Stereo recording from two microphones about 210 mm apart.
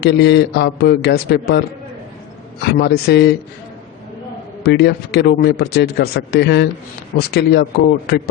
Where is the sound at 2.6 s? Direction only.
50° left (ahead or behind).